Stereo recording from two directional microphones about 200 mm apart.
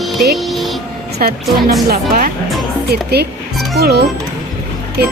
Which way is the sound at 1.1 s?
50° right (ahead or behind).